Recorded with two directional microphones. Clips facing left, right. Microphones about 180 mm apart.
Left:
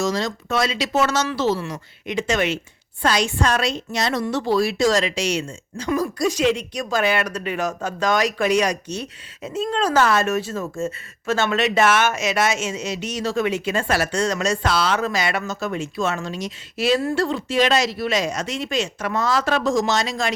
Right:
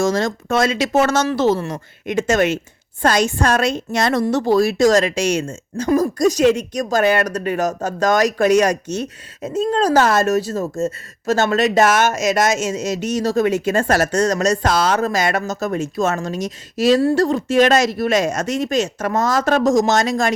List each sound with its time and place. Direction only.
0.0 s a woman's voice: 50° right (ahead or behind)